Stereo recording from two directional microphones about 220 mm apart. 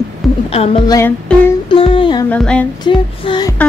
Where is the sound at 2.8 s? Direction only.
20° left (ahead or behind).